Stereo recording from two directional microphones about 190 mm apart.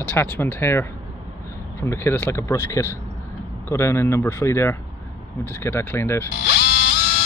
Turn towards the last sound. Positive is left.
turn(degrees=60)  # may be behind; listen again after turning